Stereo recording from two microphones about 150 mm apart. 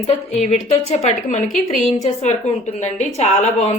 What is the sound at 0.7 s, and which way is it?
Speech, 45° left (ahead or behind).